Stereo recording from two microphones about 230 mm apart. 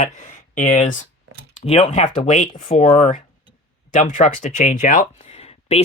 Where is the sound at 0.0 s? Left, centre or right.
Left.